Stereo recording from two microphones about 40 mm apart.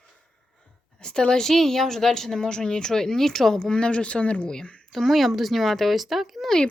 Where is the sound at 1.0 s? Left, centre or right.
Centre.